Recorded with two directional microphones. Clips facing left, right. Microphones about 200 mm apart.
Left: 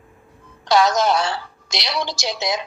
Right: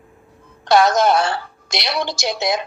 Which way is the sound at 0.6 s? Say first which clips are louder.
Right 3 dB; 55° right (ahead or behind).